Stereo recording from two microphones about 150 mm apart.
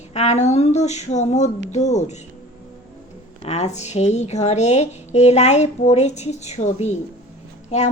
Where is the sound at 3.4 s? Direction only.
45° left (ahead or behind).